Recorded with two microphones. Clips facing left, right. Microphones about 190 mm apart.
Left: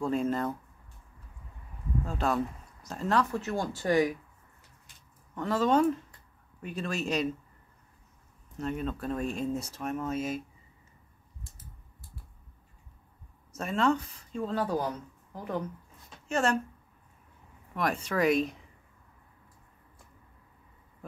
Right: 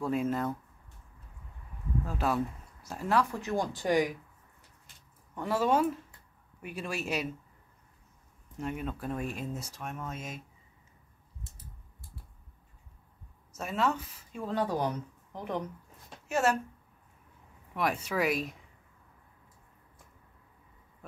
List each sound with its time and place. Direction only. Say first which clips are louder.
0.0 s speech: left 1 dB; 5° right (ahead or behind)
2.0 s speech: left 1 dB; 5° right (ahead or behind)
5.3 s speech: left 2 dB; 10° right (ahead or behind)
8.5 s speech: left 3 dB; 10° right (ahead or behind)
11.4 s a sound: right 1 dB; 25° right (ahead or behind)
13.5 s speech: left 4 dB; centre (ahead or behind); by 15.6 s 15° right (ahead or behind)
16.3 s speech: even; 5° right (ahead or behind)
17.7 s speech: left 1 dB; 10° right (ahead or behind)